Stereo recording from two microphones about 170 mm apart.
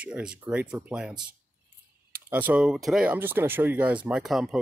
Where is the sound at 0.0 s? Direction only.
5° right (ahead or behind).